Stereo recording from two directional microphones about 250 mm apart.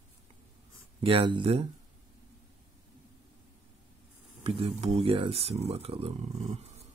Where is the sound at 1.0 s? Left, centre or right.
Right.